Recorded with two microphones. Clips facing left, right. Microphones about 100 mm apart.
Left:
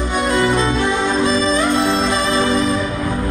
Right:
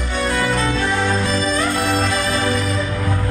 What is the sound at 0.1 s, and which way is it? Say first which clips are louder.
Music: left 3 dB; 20° left (ahead or behind).